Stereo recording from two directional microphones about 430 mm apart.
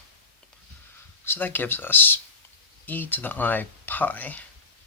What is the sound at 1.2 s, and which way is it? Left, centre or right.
Speech, centre.